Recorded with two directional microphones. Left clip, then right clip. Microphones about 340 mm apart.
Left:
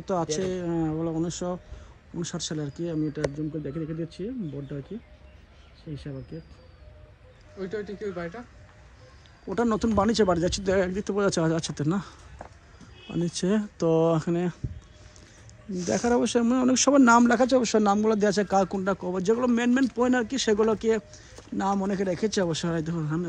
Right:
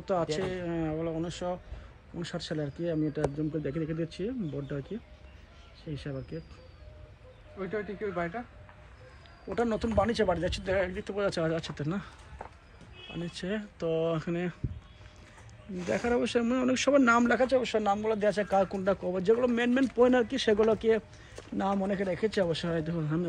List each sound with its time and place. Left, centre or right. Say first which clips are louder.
0.0 s speech: left 2 dB; centre
7.6 s speech: left 2 dB; centre
9.6 s speech: left 3 dB; centre
13.2 s speech: left 9 dB; centre
15.9 s speech: left 4 dB; centre